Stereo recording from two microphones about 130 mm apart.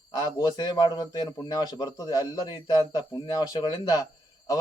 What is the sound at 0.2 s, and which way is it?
A man's voice, 35° left (ahead or behind).